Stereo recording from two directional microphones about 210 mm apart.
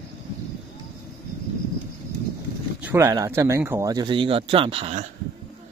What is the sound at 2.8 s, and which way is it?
Speech, 15° right (ahead or behind).